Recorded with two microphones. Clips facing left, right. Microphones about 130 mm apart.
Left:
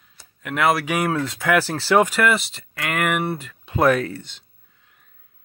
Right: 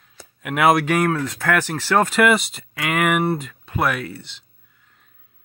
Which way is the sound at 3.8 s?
45° left (ahead or behind).